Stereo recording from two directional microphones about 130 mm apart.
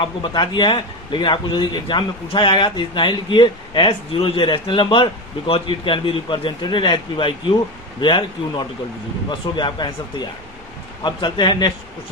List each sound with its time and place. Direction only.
0.0 s a man's voice: 40° left (ahead or behind)